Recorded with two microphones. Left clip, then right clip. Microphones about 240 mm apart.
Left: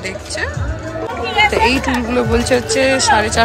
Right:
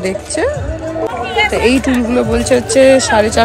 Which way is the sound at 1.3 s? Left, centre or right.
Left.